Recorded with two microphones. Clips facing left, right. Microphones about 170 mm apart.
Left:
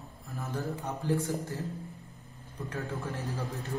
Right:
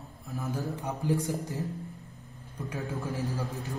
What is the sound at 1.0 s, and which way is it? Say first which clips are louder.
Speech: right 1 dB; 15° right (ahead or behind).